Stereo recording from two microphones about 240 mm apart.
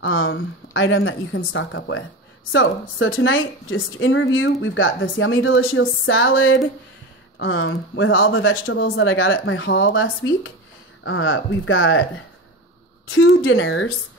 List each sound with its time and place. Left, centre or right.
0.0 s a woman's voice: left
13.0 s speech: left